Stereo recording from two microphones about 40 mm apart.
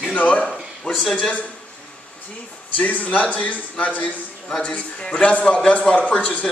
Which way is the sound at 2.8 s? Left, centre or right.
Left.